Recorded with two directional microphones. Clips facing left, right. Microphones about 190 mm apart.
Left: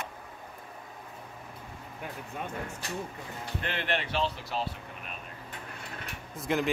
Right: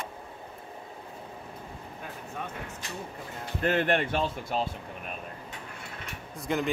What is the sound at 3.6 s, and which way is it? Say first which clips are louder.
Speech: right 8 dB; 45° right (ahead or behind).